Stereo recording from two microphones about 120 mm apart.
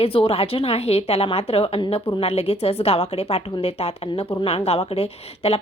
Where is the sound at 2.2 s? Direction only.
55° left (ahead or behind).